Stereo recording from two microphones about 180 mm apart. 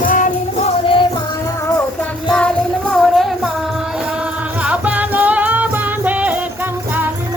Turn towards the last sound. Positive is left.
turn(degrees=-10)  # may be behind; listen again after turning